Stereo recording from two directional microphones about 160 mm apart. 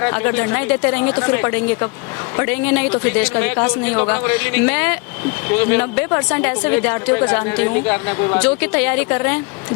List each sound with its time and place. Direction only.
0.0 s a woman's voice: 10° left (ahead or behind)